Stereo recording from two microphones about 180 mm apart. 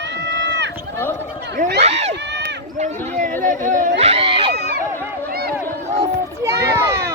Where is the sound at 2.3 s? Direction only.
75° right (ahead or behind).